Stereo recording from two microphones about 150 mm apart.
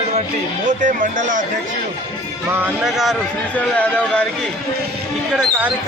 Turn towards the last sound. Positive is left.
turn(degrees=-5)  # may be behind; listen again after turning